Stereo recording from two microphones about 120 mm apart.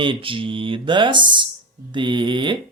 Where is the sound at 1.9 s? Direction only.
40° right (ahead or behind).